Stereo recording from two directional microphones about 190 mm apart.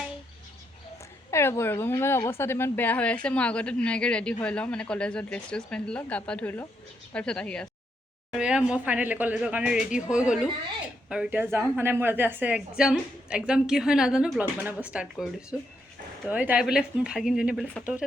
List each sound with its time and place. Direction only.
1.3 s a woman's voice: 15° left (ahead or behind); by 18.0 s 5° right (ahead or behind)